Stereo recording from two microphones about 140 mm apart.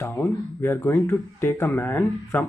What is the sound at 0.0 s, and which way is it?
Speech, 15° left (ahead or behind).